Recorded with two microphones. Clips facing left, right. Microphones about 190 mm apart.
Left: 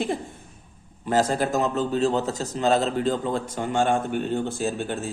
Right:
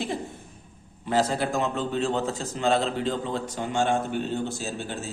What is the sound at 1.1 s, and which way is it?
A man's voice, 45° left (ahead or behind).